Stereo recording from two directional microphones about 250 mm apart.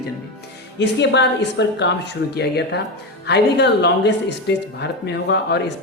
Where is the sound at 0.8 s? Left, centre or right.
Left.